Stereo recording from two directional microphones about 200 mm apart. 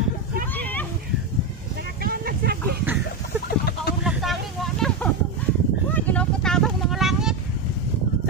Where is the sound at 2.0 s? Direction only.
50° right (ahead or behind).